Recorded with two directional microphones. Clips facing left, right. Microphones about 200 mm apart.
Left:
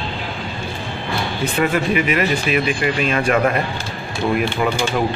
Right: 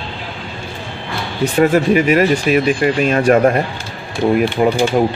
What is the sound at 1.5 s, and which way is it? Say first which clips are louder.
Speech: right 7 dB; 45° right (ahead or behind).